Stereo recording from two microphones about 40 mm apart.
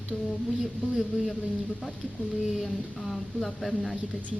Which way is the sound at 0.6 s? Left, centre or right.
Centre.